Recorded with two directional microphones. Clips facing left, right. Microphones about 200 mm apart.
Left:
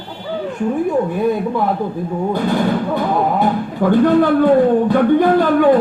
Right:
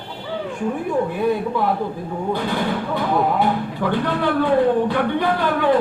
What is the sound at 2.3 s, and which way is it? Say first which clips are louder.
A man's voice: left 5 dB; 45° left (ahead or behind).